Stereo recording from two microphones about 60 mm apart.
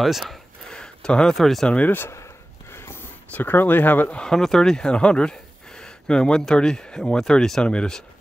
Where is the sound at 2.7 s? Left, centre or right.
Left.